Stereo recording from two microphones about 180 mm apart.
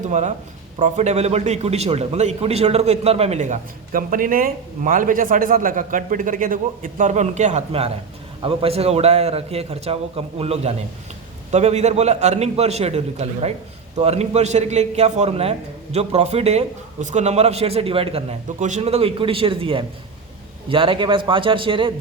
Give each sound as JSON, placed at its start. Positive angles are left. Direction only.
{"t": 0.0, "sound": "a man's voice", "side_deg": -40}